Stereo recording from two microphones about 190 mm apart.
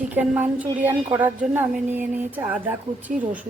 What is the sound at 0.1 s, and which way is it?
Speech, 10° right (ahead or behind).